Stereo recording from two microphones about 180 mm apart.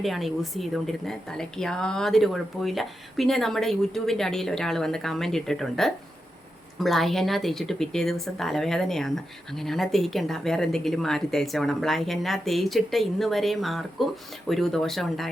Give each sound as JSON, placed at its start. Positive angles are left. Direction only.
{"t": 0.0, "sound": "speech", "side_deg": 0}